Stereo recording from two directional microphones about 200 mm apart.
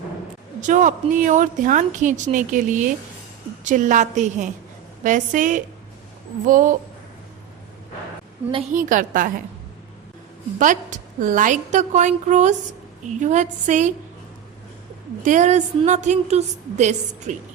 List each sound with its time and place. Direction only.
0.6 s a woman's voice: 40° right (ahead or behind)
8.7 s a woman's voice: 40° right (ahead or behind)
10.6 s a woman's voice: 40° right (ahead or behind)
15.2 s a woman's voice: 40° right (ahead or behind)